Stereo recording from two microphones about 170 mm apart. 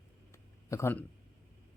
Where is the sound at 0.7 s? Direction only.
15° left (ahead or behind).